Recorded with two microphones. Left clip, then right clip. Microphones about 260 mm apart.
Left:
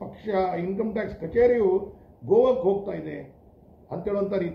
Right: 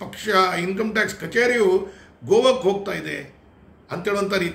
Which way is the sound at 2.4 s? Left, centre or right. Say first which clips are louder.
Right 3 dB; right.